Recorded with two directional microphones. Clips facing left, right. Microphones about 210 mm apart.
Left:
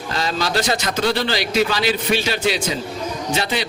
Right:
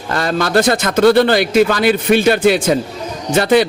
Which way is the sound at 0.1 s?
55° right (ahead or behind).